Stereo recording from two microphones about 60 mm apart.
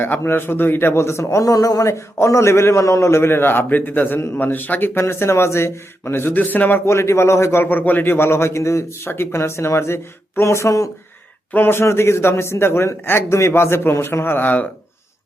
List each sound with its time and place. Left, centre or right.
0.0 s a man's voice: left
1.9 s a man's voice: left
4.9 s a man's voice: left
6.8 s a man's voice: left
11.5 s a man's voice: left